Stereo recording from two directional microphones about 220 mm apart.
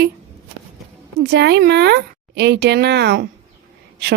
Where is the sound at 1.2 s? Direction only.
50° right (ahead or behind).